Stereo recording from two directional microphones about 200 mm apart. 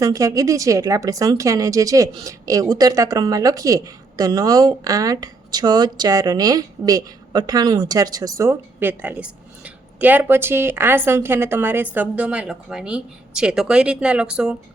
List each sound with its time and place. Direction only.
0.0 s a woman's voice: 15° right (ahead or behind)